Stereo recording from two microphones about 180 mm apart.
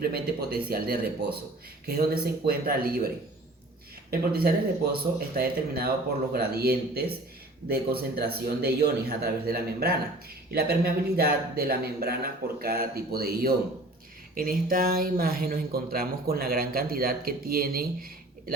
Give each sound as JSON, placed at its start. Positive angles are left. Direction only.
{"t": 0.0, "sound": "speech", "side_deg": -60}
{"t": 4.1, "sound": "speech", "side_deg": -55}